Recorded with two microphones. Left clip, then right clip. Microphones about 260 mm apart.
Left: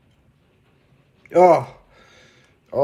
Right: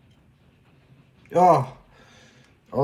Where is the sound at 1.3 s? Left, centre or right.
Left.